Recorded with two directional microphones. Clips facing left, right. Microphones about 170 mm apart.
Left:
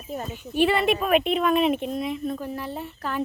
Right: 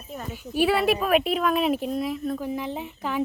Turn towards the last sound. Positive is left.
turn(degrees=-10)  # may be behind; listen again after turning